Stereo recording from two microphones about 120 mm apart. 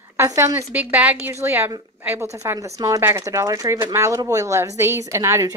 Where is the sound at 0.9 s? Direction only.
10° right (ahead or behind).